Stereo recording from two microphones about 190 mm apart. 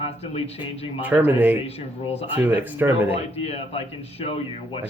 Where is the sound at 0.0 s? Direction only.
30° left (ahead or behind).